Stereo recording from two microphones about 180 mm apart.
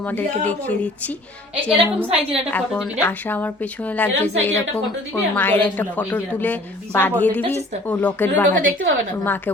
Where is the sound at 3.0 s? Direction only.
10° left (ahead or behind).